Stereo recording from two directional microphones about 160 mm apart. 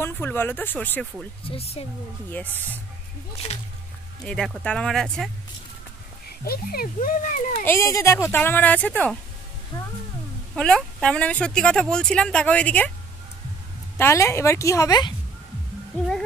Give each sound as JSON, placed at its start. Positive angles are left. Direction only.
{"t": 0.0, "sound": "a woman's voice", "side_deg": 15}
{"t": 1.4, "sound": "speech", "side_deg": 35}
{"t": 2.3, "sound": "a woman's voice", "side_deg": 10}
{"t": 3.4, "sound": "speech", "side_deg": 40}
{"t": 4.3, "sound": "speech", "side_deg": 5}
{"t": 6.4, "sound": "speech", "side_deg": 70}
{"t": 7.6, "sound": "a woman's voice", "side_deg": 15}
{"t": 9.7, "sound": "speech", "side_deg": 20}
{"t": 10.5, "sound": "speech", "side_deg": 5}
{"t": 13.9, "sound": "a woman's voice", "side_deg": 15}
{"t": 16.0, "sound": "music", "side_deg": 5}